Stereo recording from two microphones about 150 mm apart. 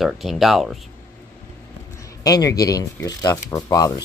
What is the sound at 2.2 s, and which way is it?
Speech, 25° left (ahead or behind).